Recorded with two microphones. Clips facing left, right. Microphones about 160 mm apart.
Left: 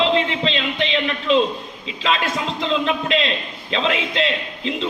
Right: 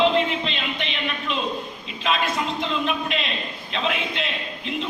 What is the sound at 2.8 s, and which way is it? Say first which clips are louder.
A man's voice: left 5 dB; 90° left.